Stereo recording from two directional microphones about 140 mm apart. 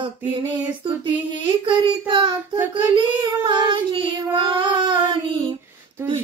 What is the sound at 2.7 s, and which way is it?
Child singing, 35° right (ahead or behind).